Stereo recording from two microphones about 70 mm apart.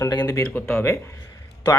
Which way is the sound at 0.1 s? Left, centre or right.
Left.